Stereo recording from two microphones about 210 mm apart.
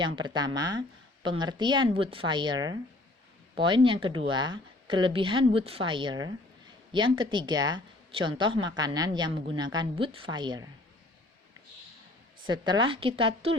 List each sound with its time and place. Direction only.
0.0 s speech: 20° right (ahead or behind)
12.5 s speech: 20° right (ahead or behind)